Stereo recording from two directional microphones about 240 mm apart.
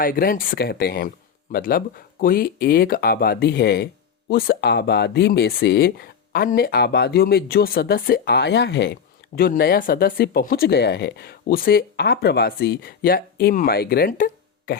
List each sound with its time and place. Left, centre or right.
0.0 s speech: left